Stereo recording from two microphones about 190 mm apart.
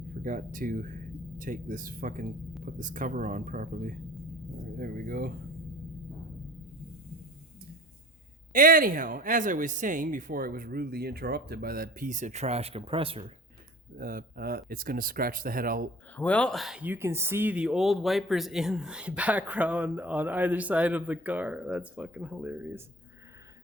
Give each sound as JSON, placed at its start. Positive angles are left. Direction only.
{"t": 0.1, "sound": "speech", "side_deg": -45}
{"t": 8.5, "sound": "speech", "side_deg": -45}
{"t": 13.9, "sound": "speech", "side_deg": -45}
{"t": 16.1, "sound": "speech", "side_deg": 5}